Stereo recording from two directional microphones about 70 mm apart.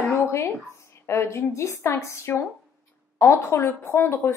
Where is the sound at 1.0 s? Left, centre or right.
Left.